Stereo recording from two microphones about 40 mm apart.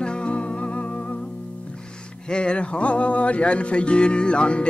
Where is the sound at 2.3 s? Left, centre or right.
Left.